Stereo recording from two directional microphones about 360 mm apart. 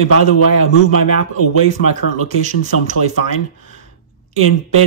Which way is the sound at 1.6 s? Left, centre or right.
Centre.